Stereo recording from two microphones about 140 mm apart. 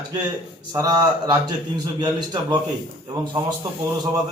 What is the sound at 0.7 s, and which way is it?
A man's voice, 30° right (ahead or behind).